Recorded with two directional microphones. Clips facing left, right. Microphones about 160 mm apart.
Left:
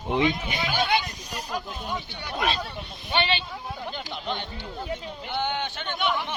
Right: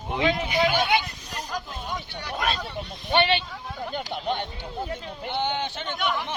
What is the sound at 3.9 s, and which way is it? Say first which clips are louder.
Speech: right 8 dB; 50° right (ahead or behind).